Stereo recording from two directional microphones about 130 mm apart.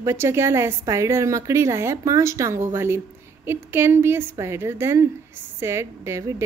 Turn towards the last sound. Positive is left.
turn(degrees=-20)  # may be behind; listen again after turning